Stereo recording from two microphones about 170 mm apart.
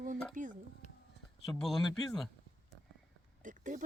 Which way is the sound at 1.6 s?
Centre (ahead or behind).